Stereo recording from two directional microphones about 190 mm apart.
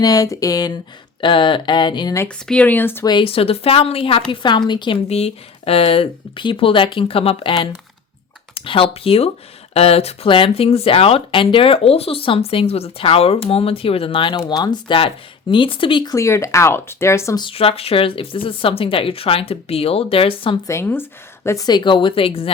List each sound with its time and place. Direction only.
0.0 s speech: 20° left (ahead or behind)
2.2 s speech: 5° left (ahead or behind)
3.1 s speech: 25° left (ahead or behind)
20.7 s speech: 15° left (ahead or behind); by 22.5 s 30° left (ahead or behind)